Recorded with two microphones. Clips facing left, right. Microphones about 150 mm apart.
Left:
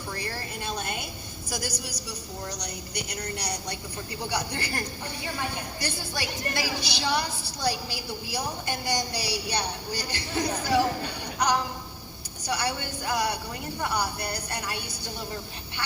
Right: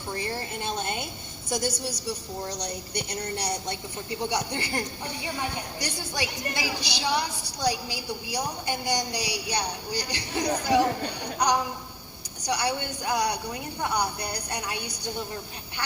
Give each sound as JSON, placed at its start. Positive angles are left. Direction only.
{"t": 0.1, "sound": "a woman's voice", "side_deg": -25}